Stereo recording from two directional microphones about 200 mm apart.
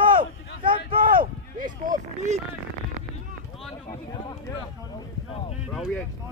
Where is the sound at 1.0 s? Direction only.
45° right (ahead or behind).